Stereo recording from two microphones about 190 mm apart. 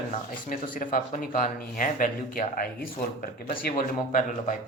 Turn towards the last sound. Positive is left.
turn(degrees=45)  # may be behind; listen again after turning